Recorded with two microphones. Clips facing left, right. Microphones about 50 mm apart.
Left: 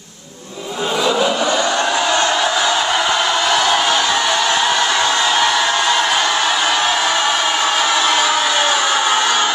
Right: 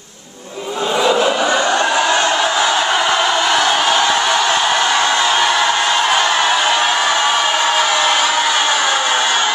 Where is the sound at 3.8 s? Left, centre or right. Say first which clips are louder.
Right 2 dB; centre.